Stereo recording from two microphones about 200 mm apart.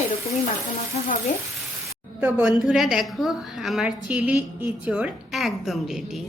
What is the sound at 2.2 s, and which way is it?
A woman's voice, 5° right (ahead or behind).